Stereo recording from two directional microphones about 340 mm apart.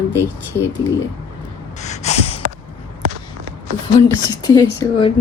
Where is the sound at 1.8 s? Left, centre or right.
Centre.